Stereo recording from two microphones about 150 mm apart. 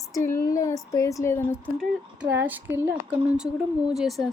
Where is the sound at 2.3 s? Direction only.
15° right (ahead or behind).